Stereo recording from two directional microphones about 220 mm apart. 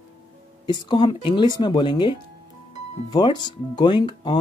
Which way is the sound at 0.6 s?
20° left (ahead or behind).